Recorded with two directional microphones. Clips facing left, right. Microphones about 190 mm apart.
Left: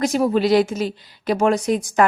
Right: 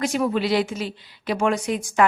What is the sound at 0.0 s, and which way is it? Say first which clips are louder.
Speech: left 4 dB; 40° left (ahead or behind).